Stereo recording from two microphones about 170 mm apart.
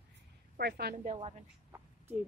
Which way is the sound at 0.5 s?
70° right (ahead or behind).